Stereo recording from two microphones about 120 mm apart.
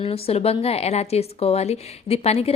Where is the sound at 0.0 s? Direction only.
55° left (ahead or behind).